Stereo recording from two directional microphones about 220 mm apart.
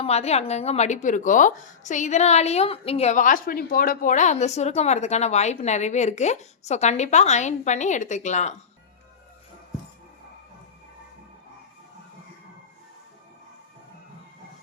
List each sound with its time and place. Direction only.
0.0 s speech: 30° left (ahead or behind)